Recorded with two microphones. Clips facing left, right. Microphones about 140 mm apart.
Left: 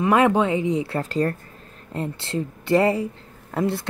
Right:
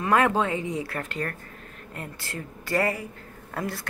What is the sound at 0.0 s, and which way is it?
A woman's voice, 20° left (ahead or behind).